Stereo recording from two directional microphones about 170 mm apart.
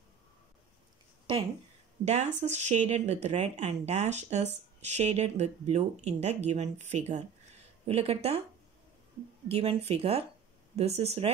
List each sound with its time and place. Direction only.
2.0 s speech: 40° right (ahead or behind)
9.5 s speech: 35° right (ahead or behind)